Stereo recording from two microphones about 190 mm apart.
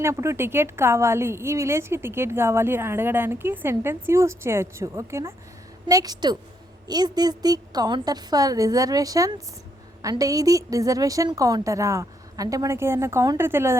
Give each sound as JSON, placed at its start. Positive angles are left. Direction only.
{"t": 0.0, "sound": "a woman's voice", "side_deg": -15}